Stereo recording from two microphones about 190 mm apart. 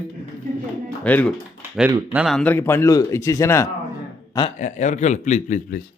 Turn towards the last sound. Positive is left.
turn(degrees=45)  # may be behind; listen again after turning